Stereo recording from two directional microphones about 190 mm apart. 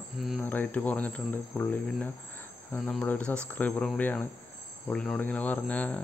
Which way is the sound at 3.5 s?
10° left (ahead or behind).